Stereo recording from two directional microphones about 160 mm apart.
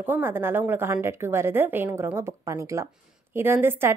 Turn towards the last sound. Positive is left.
turn(degrees=-15)  # may be behind; listen again after turning